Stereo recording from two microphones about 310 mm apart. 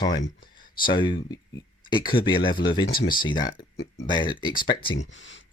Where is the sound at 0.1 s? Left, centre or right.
Left.